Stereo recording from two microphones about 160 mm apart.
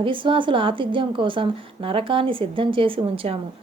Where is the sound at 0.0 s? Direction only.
30° right (ahead or behind).